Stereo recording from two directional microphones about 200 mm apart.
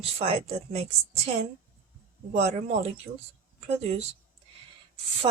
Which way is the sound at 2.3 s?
35° right (ahead or behind).